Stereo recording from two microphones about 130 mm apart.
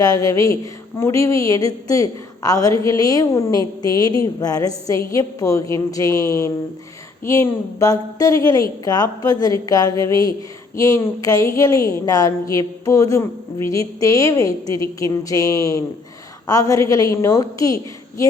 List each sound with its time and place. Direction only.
0.0 s a woman's voice: 25° left (ahead or behind)